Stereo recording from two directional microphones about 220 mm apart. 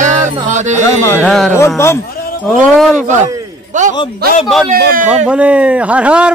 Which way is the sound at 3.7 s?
35° right (ahead or behind).